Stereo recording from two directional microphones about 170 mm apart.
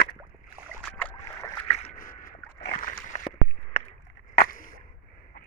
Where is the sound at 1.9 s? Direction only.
50° left (ahead or behind).